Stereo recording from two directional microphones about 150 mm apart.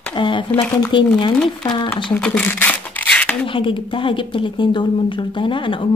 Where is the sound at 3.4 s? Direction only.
35° left (ahead or behind).